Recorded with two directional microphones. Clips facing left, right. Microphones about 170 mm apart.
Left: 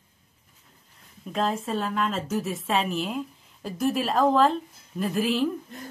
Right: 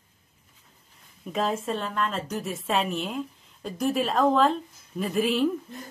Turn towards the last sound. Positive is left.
turn(degrees=0)  # may be behind; listen again after turning